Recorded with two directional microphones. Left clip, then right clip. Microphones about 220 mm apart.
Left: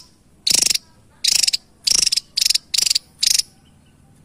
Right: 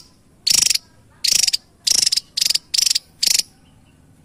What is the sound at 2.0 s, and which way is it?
Cricket, 5° left (ahead or behind).